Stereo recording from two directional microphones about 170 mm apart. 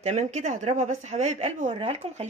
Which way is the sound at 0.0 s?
45° right (ahead or behind).